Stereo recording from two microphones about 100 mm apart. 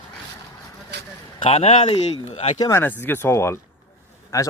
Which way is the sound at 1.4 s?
75° left (ahead or behind).